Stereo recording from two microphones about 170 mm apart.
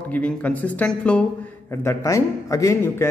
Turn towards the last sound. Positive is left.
turn(degrees=15)  # may be behind; listen again after turning